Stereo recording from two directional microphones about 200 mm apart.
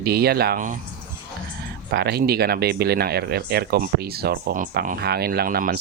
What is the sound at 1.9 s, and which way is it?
Speech, 55° right (ahead or behind).